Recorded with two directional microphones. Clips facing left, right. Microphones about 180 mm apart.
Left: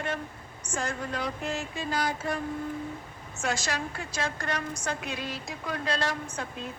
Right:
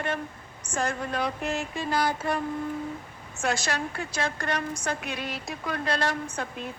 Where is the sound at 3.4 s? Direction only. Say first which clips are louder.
Right 3 dB; 60° right (ahead or behind).